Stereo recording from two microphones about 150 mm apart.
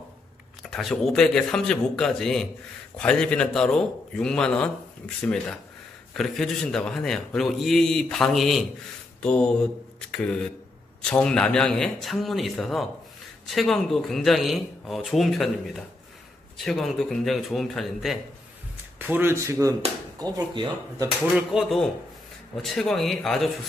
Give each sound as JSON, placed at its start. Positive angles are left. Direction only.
{"t": 0.6, "sound": "a man's voice", "side_deg": 0}
{"t": 18.9, "sound": "speech", "side_deg": -15}
{"t": 21.4, "sound": "a man's voice", "side_deg": 0}